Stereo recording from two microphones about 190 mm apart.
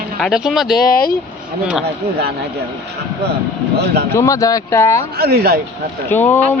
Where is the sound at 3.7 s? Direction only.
60° right (ahead or behind).